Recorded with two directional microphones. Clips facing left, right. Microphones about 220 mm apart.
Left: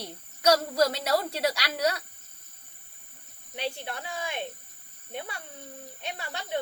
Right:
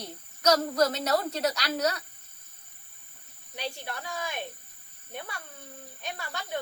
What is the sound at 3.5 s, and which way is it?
Speech, 20° left (ahead or behind).